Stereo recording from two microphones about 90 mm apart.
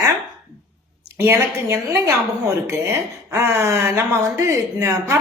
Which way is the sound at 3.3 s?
35° right (ahead or behind).